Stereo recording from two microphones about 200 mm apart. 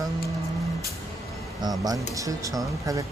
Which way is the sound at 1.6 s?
20° right (ahead or behind).